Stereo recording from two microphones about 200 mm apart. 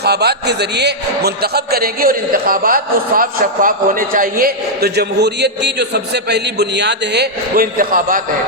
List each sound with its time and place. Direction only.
0.0 s a man's voice: 55° right (ahead or behind)